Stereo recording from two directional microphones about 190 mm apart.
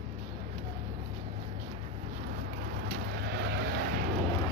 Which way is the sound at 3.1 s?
60° right (ahead or behind).